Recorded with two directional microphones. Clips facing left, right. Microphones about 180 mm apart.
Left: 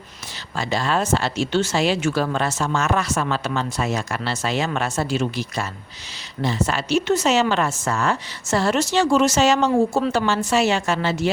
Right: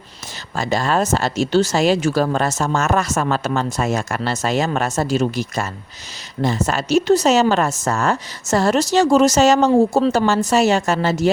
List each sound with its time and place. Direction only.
0.5 s speech: 45° right (ahead or behind)